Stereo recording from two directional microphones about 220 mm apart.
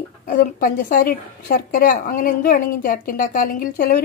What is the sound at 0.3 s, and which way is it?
A woman's voice, 40° left (ahead or behind).